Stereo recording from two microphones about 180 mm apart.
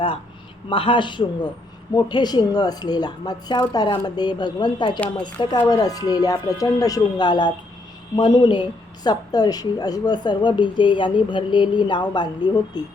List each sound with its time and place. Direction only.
0.7 s a woman's voice: 30° left (ahead or behind)